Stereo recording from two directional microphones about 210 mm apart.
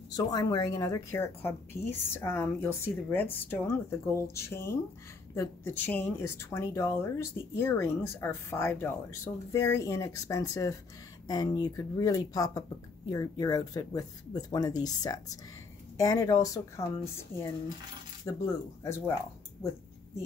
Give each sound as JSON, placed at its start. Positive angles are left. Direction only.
{"t": 0.1, "sound": "speech", "side_deg": 20}